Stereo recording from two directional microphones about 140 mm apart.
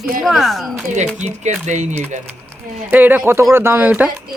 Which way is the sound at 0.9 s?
55° right (ahead or behind).